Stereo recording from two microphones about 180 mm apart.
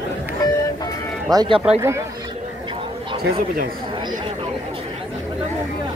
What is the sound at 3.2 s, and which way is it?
Speech, 55° right (ahead or behind).